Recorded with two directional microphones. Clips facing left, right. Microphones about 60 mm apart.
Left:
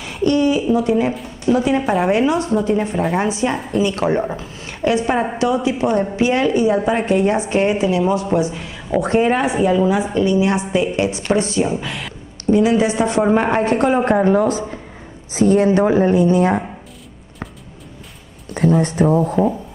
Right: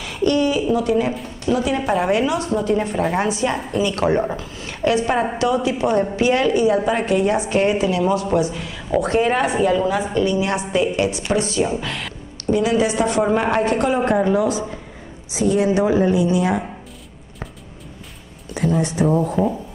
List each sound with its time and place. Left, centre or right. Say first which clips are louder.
0.2 s a woman's voice: left 2 dB; left
1.8 s speech: left 2 dB; centre
2.0 s a woman's voice: left 3 dB; left
3.0 s a woman's voice: left 1 dB; centre
4.4 s a woman's voice: even; left
9.3 s a woman's voice: left 1 dB; centre; by 11.6 s left
11.6 s speech: left 1 dB; centre
12.4 s a woman's voice: left 3 dB; left
14.2 s a woman's voice: left 3 dB; left
18.8 s speech: left 3 dB; left
19.4 s speech: left 3 dB; centre